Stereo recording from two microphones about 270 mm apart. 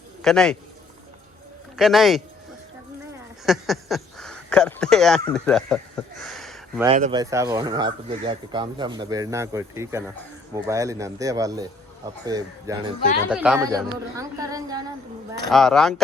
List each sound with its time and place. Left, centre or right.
0.2 s a man's voice: centre
1.7 s speech: centre
3.4 s speech: centre
6.9 s speech: right
7.2 s speech: centre
13.3 s speech: centre
15.4 s speech: centre